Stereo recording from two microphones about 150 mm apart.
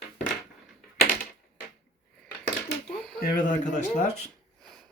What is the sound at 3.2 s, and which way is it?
Speech, 90° left.